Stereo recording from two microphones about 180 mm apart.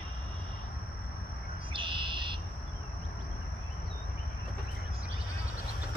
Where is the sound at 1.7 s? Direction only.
25° right (ahead or behind).